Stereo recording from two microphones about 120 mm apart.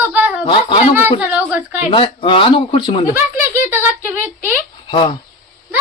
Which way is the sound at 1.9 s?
45° left (ahead or behind).